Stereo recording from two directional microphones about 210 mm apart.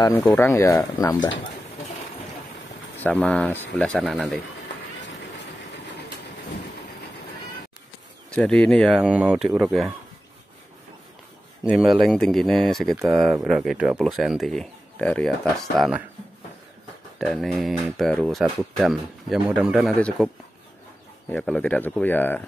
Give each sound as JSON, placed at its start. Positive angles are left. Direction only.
{"t": 0.0, "sound": "speech", "side_deg": 10}
{"t": 3.0, "sound": "speech", "side_deg": 5}
{"t": 8.3, "sound": "speech", "side_deg": 5}
{"t": 11.6, "sound": "speech", "side_deg": 0}
{"t": 17.2, "sound": "speech", "side_deg": 0}
{"t": 21.3, "sound": "speech", "side_deg": 5}